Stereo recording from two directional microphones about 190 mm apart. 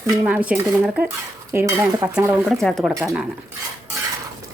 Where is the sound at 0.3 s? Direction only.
10° right (ahead or behind).